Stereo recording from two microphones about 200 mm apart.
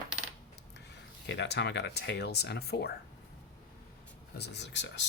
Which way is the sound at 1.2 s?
60° left (ahead or behind).